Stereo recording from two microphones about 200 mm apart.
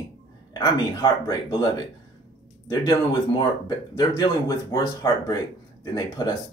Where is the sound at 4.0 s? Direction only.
20° left (ahead or behind).